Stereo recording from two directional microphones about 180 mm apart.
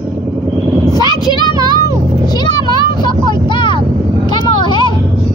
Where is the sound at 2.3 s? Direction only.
25° left (ahead or behind).